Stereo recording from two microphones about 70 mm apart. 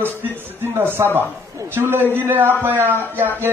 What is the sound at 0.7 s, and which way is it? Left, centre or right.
A man's voice, right.